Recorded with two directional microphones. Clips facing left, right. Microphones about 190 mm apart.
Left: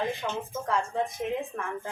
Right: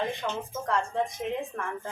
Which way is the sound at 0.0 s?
Centre (ahead or behind).